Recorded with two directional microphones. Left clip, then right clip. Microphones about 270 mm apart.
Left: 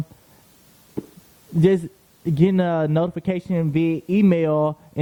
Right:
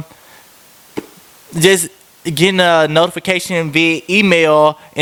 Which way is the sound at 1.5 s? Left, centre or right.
Centre.